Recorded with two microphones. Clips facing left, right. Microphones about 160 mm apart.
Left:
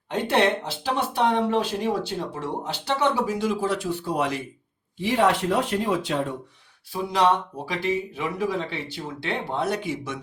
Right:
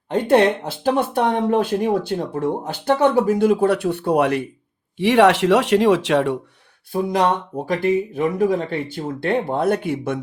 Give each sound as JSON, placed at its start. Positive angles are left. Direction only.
{"t": 0.1, "sound": "speech", "side_deg": -50}
{"t": 4.9, "sound": "speech", "side_deg": -75}
{"t": 6.9, "sound": "speech", "side_deg": -50}